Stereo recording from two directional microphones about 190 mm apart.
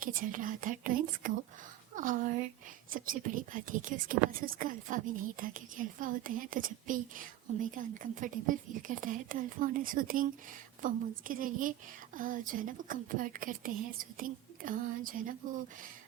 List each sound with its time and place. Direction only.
0.0 s a woman's voice: 45° right (ahead or behind)